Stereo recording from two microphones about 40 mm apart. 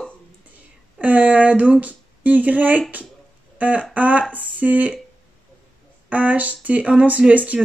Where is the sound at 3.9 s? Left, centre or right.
Right.